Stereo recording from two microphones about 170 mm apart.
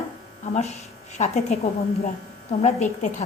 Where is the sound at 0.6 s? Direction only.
40° left (ahead or behind).